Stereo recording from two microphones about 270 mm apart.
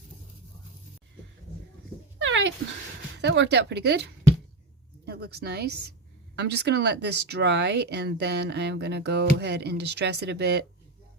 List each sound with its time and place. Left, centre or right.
2.1 s dog: right
3.2 s speech: right
5.0 s speech: right